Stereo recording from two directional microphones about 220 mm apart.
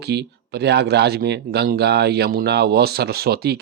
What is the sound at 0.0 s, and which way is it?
Speech, 50° right (ahead or behind).